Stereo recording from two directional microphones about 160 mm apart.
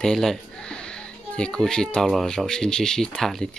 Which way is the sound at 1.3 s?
5° left (ahead or behind).